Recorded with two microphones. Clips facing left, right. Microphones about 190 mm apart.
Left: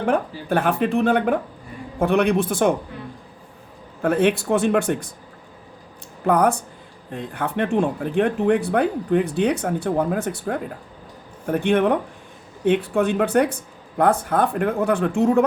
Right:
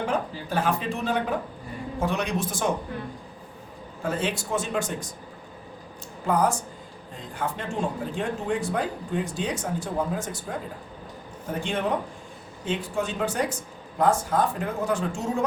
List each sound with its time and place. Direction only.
0.0 s speech: 55° left (ahead or behind)
4.0 s speech: 60° left (ahead or behind)
6.2 s speech: 60° left (ahead or behind)